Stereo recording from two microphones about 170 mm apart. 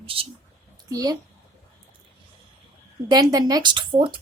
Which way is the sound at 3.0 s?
20° right (ahead or behind).